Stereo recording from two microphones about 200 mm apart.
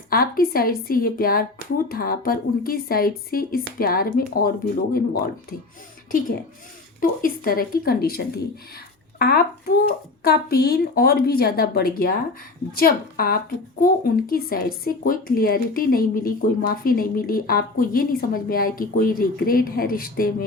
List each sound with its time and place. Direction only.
0.1 s speech: 50° left (ahead or behind)